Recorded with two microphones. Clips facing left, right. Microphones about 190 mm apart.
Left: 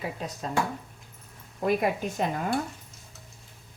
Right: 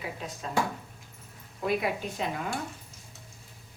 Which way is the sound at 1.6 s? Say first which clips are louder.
Left 3 dB; 45° left (ahead or behind).